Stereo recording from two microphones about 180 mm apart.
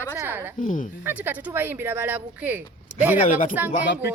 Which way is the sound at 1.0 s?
10° right (ahead or behind).